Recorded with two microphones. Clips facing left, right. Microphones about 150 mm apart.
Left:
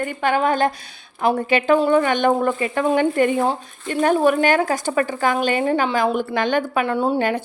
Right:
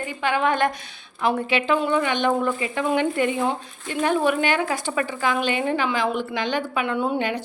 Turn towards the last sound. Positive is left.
turn(degrees=50)  # may be behind; listen again after turning